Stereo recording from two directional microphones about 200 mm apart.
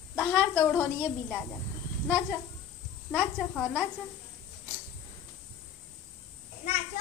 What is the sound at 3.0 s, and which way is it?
Speech, 5° left (ahead or behind).